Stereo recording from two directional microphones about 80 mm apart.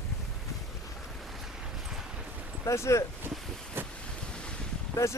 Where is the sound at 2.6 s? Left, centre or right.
Left.